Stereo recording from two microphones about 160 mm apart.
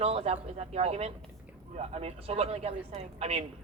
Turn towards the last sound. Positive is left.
turn(degrees=-40)  # may be behind; listen again after turning